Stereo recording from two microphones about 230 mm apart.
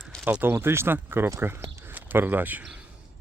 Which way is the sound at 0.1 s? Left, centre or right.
Centre.